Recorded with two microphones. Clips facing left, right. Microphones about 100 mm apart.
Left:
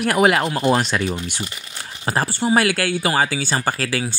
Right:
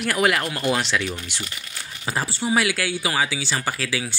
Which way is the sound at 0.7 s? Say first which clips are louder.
Left 4 dB; 40° left (ahead or behind).